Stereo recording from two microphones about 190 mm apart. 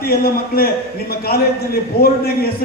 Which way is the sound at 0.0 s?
55° left (ahead or behind).